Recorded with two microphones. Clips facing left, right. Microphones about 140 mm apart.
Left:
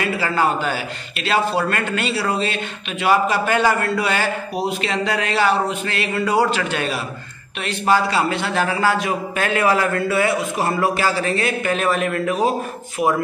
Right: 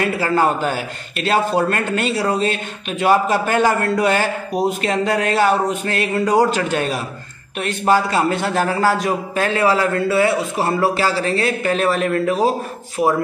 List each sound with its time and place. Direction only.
0.0 s a man's voice: 45° right (ahead or behind)